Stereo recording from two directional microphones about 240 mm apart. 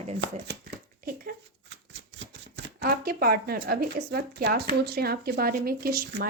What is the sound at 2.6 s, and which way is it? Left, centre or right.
Speech, right.